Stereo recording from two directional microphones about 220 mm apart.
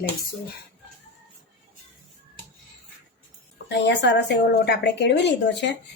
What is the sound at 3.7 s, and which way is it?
A woman's voice, 55° left (ahead or behind).